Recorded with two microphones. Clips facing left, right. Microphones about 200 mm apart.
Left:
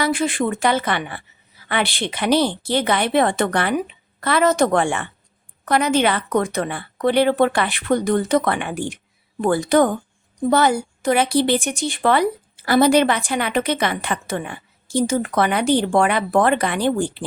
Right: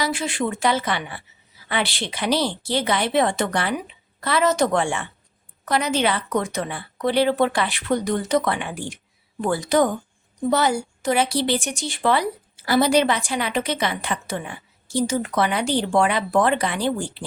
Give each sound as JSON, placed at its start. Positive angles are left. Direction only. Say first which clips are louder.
{"t": 0.0, "sound": "a woman's voice", "louder": "left 4 dB", "side_deg": 55}